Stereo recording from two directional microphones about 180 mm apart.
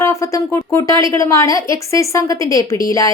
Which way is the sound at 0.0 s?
15° left (ahead or behind).